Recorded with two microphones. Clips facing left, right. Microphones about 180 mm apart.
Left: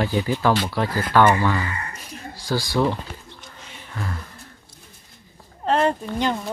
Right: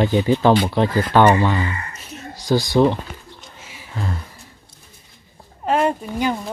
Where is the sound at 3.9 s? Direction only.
25° right (ahead or behind).